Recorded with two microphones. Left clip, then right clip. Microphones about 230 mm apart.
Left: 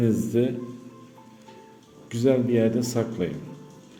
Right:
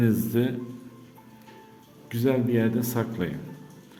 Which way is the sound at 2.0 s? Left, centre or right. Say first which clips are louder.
Left 3 dB; centre.